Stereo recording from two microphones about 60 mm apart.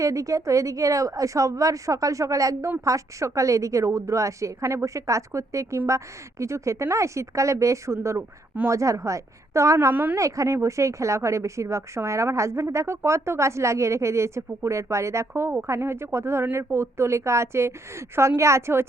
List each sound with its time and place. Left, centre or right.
0.0 s a woman's voice: right
9.9 s a woman's voice: right
10.2 s a woman's voice: right